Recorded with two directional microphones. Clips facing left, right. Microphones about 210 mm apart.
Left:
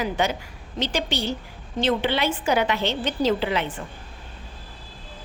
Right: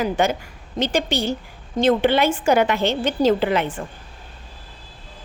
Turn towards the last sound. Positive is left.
turn(degrees=-50)  # may be behind; listen again after turning